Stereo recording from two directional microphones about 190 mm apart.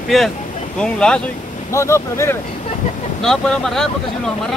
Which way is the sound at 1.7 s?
15° left (ahead or behind).